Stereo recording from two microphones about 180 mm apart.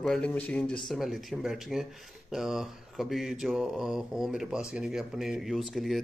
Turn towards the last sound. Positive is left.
turn(degrees=0)  # may be behind; listen again after turning